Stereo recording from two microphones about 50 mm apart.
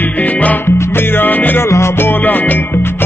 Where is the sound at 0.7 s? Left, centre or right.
Left.